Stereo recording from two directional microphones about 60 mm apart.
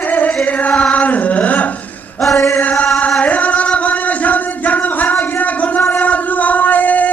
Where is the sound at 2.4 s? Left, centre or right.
Left.